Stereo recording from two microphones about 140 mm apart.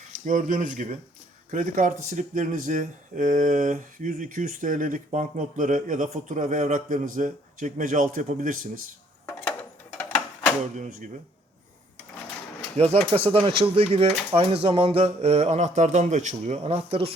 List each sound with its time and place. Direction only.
0.3 s a man's voice: 65° right (ahead or behind)
10.0 s a sound: 10° left (ahead or behind)
10.8 s speech: 60° right (ahead or behind)
12.7 s speech: 45° right (ahead or behind)